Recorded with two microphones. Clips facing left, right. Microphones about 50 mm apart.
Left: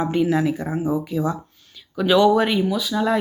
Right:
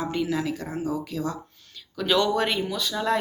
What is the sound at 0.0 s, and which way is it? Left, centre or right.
Speech, left.